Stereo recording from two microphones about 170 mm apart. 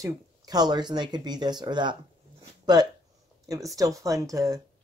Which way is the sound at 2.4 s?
25° right (ahead or behind).